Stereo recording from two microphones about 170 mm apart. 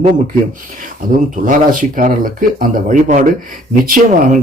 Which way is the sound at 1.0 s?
55° right (ahead or behind).